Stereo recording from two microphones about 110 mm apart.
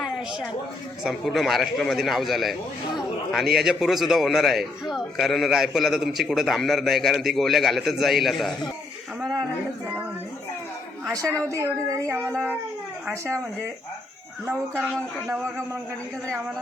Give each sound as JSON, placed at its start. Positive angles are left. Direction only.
{"t": 0.0, "sound": "a sound", "side_deg": -5}
{"t": 1.0, "sound": "a man's voice", "side_deg": 0}
{"t": 11.1, "sound": "speech", "side_deg": -30}
{"t": 12.3, "sound": "a man's voice", "side_deg": 5}
{"t": 15.3, "sound": "speech", "side_deg": -25}